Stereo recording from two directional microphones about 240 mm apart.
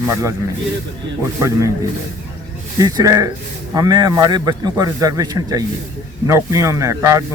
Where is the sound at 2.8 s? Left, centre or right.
Centre.